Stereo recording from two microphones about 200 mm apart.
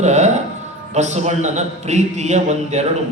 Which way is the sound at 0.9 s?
35° right (ahead or behind).